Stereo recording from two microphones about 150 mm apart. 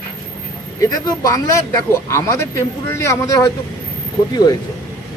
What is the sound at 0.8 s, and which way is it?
Speech, 25° left (ahead or behind).